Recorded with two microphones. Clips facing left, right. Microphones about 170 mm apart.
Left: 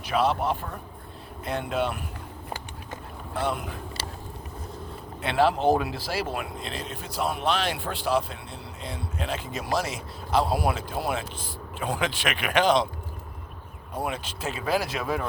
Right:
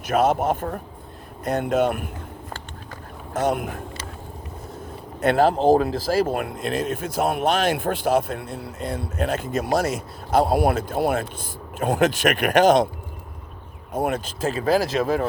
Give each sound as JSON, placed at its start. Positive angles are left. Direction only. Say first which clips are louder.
{"t": 0.0, "sound": "speech", "louder": "right 5 dB", "side_deg": -45}
{"t": 3.3, "sound": "speech", "louder": "right 6 dB", "side_deg": -50}
{"t": 5.2, "sound": "speech", "louder": "right 5 dB", "side_deg": -45}
{"t": 13.9, "sound": "speech", "louder": "right 7 dB", "side_deg": -45}